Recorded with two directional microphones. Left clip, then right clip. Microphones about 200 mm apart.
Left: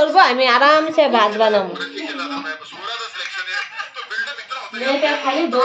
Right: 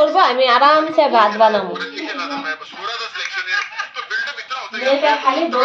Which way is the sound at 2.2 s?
30° right (ahead or behind).